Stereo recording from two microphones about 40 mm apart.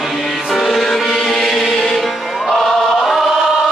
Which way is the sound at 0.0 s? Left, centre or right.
Centre.